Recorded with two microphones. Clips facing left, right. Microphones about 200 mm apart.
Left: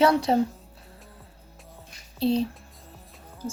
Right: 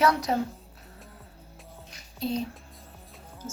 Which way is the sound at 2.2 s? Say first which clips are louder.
Left 6 dB; 30° left (ahead or behind).